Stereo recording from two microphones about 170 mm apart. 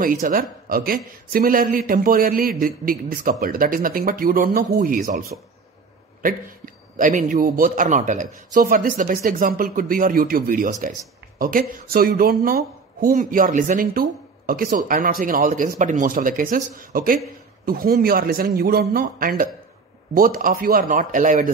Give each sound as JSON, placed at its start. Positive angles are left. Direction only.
{"t": 0.0, "sound": "a man's voice", "side_deg": -55}
{"t": 6.2, "sound": "a man's voice", "side_deg": -55}